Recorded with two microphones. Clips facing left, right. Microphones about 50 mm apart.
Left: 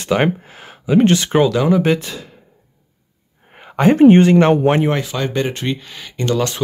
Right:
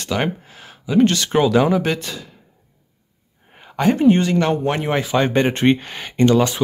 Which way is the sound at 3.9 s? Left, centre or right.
Left.